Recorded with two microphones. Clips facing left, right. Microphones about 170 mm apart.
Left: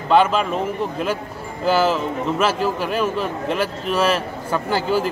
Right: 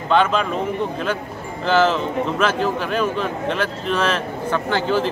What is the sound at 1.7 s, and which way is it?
A man's voice, 10° left (ahead or behind).